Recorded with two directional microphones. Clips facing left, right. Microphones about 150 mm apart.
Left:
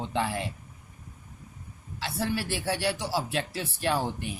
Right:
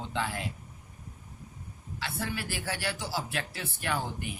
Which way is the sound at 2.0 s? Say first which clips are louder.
Left 5 dB; 35° left (ahead or behind).